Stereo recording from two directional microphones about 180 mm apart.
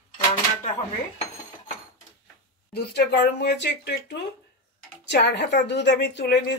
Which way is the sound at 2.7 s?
65° left (ahead or behind).